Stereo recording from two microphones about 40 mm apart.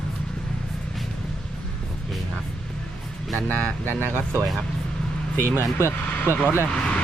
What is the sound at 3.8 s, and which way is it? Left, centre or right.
Speech, left.